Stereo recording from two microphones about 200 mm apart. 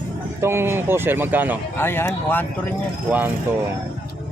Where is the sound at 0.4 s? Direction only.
10° right (ahead or behind).